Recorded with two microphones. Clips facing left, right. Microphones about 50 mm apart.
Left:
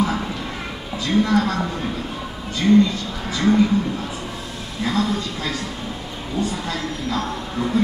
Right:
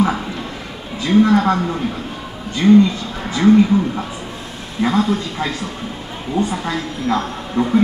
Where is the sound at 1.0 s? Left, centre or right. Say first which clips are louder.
Right 6 dB; centre.